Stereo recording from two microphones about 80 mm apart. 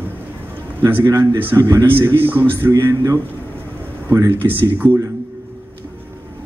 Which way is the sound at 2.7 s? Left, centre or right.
Right.